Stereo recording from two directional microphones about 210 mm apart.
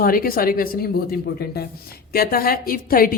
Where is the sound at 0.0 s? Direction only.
45° left (ahead or behind).